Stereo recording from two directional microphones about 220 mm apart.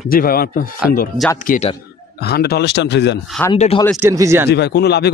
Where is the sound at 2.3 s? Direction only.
45° left (ahead or behind).